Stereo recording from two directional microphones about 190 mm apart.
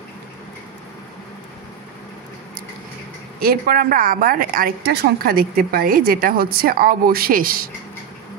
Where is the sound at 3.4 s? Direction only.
50° right (ahead or behind).